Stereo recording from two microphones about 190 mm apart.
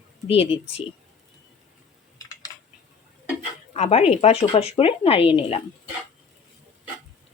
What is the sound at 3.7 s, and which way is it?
Speech, 35° left (ahead or behind).